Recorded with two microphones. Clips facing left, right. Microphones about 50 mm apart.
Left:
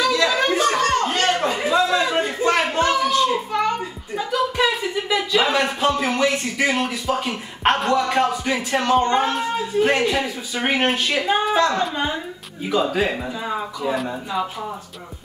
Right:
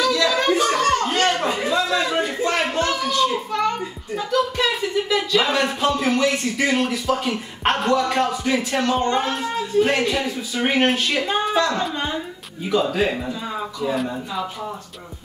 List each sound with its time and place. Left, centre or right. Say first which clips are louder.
0.0 s a sound: even; centre
2.0 s a child's voice: left 2 dB; centre
8.7 s speech: left 6 dB; centre
9.0 s speech: left 2 dB; centre